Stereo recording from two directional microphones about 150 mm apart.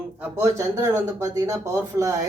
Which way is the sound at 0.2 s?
15° right (ahead or behind).